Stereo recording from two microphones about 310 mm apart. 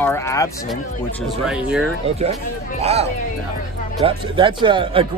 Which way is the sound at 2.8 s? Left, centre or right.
Centre.